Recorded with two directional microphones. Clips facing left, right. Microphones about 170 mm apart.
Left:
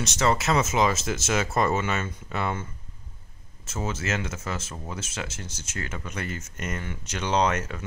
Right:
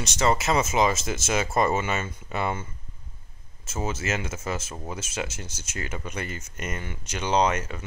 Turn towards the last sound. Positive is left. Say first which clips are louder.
# right 1 dB
turn(degrees=-10)  # may be behind; listen again after turning